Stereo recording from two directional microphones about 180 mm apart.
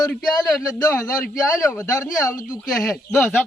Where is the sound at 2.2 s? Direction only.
20° left (ahead or behind).